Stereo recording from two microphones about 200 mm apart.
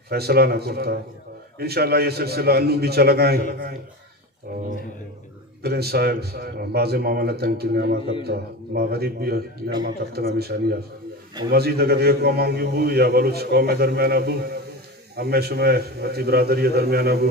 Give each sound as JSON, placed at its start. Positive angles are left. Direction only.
{"t": 0.1, "sound": "a man's voice", "side_deg": -50}
{"t": 5.6, "sound": "a man's voice", "side_deg": -50}